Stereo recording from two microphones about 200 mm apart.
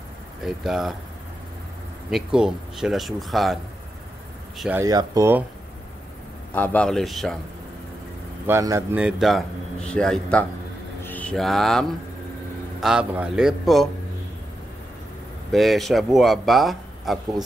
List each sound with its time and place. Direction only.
0.4 s speech: centre (ahead or behind)
2.0 s speech: centre (ahead or behind)
4.6 s speech: 5° right (ahead or behind)
4.8 s speech: 15° right (ahead or behind)
6.5 s speech: 10° left (ahead or behind)
8.5 s speech: 15° right (ahead or behind)
9.0 s speech: centre (ahead or behind)
15.5 s speech: centre (ahead or behind)